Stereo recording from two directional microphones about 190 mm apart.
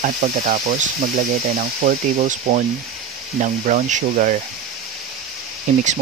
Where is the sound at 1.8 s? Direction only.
40° right (ahead or behind).